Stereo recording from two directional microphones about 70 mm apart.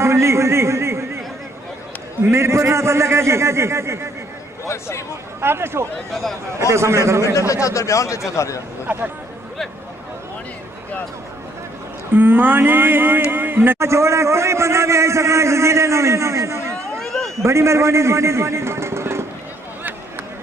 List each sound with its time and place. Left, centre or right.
0.0 s a sound: right
2.2 s a man's voice: right
4.6 s speech: left
5.4 s a man's voice: right
7.3 s speech: left
8.9 s speech: centre
12.1 s speech: right
13.7 s a man's voice: right
17.0 s a sound: centre
17.4 s a man's voice: right